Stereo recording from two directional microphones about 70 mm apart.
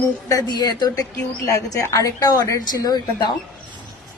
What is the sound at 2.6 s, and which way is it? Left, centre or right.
Speech, left.